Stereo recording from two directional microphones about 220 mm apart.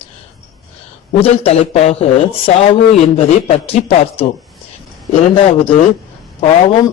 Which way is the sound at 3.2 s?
25° left (ahead or behind).